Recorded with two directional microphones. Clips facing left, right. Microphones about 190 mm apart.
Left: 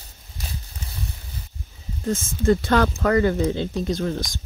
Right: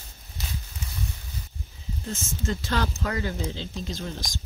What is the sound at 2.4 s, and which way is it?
Speech, 55° left (ahead or behind).